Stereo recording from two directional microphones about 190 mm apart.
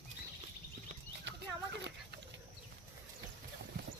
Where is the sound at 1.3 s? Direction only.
65° right (ahead or behind).